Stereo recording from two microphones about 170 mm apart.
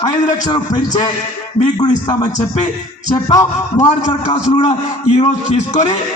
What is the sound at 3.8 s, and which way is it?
A man's voice, 40° left (ahead or behind).